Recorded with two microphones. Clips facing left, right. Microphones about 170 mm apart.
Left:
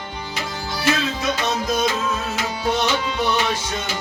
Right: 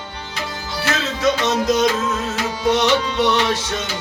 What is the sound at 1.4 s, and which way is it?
Music, 85° right.